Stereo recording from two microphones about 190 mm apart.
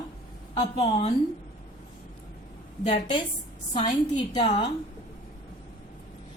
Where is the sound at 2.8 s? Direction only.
40° left (ahead or behind).